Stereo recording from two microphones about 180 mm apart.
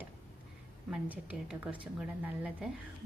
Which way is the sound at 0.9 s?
5° right (ahead or behind).